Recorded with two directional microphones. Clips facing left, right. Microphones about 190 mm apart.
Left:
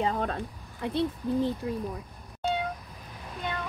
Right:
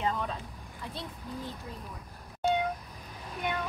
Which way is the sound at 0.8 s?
65° left (ahead or behind).